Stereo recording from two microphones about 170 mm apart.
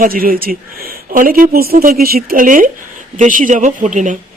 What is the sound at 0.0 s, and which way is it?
A woman's voice, 60° right (ahead or behind).